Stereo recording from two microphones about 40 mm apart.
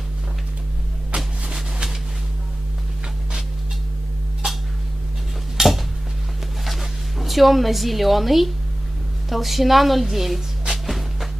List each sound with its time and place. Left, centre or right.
1.1 s a sound: centre
5.6 s cutlery: centre
6.6 s zipper: centre
9.3 s a woman's voice: centre
10.7 s music: centre